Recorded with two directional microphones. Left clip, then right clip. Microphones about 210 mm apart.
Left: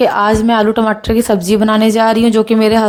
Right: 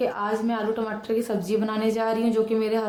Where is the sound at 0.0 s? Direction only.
45° left (ahead or behind).